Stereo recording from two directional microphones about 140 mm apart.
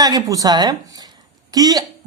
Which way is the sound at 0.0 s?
25° right (ahead or behind).